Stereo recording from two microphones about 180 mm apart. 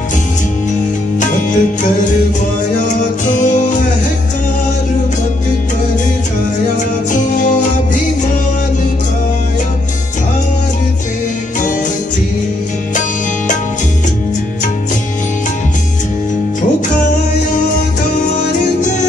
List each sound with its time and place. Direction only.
1.2 s music: 45° left (ahead or behind)
3.3 s music: 45° left (ahead or behind)
7.1 s music: 45° left (ahead or behind)